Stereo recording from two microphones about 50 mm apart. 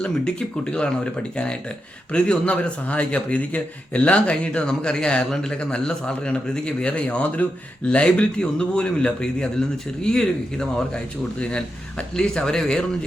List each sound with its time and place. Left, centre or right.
0.0 s speech: centre
2.1 s speech: left